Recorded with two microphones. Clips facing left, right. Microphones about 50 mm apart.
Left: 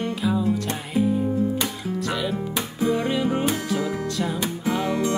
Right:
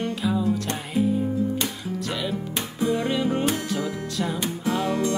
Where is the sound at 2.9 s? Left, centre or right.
Centre.